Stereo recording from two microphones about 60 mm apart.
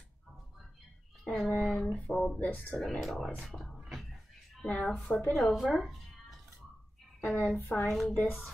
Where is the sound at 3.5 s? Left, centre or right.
Centre.